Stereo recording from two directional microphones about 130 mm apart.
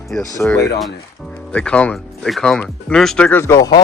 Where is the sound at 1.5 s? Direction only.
10° left (ahead or behind).